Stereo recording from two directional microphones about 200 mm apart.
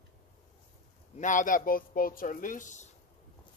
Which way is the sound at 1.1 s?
40° left (ahead or behind).